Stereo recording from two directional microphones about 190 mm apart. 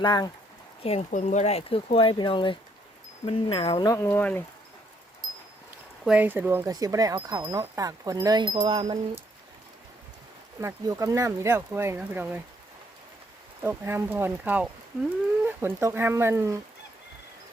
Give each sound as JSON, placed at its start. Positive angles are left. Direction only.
{"t": 0.0, "sound": "speech", "side_deg": 20}
{"t": 0.8, "sound": "speech", "side_deg": 35}
{"t": 5.2, "sound": "a sound", "side_deg": 0}
{"t": 6.1, "sound": "speech", "side_deg": -10}
{"t": 10.6, "sound": "speech", "side_deg": -15}
{"t": 13.6, "sound": "speech", "side_deg": -10}